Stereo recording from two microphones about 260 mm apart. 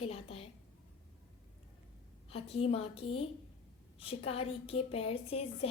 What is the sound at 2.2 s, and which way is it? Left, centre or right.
A woman's voice, left.